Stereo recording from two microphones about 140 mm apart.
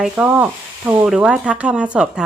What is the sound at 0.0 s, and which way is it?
Speech, 10° right (ahead or behind).